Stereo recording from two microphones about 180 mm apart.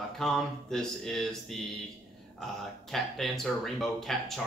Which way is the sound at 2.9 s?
Centre (ahead or behind).